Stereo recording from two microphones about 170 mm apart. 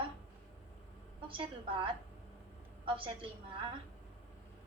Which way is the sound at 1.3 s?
30° right (ahead or behind).